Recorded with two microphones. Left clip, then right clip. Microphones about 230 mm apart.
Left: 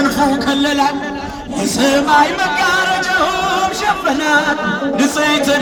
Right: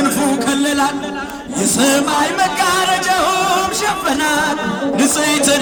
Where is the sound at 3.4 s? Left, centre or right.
Right.